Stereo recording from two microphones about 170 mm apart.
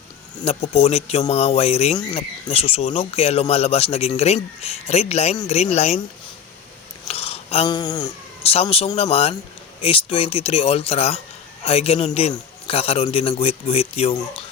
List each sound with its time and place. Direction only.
0.4 s speech: 35° left (ahead or behind)
7.1 s a sound: 35° left (ahead or behind)
7.7 s speech: 25° left (ahead or behind)
8.6 s speech: 35° left (ahead or behind)